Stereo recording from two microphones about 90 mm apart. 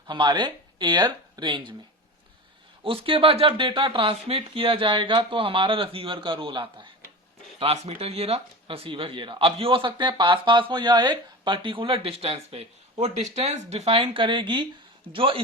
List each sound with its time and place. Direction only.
0.1 s speech: 55° right (ahead or behind)
2.8 s speech: 80° right; by 6.9 s 65° right (ahead or behind)
7.6 s speech: 90° right
13.8 s speech: 90° right; by 14.7 s 65° right (ahead or behind)
15.1 s speech: 80° right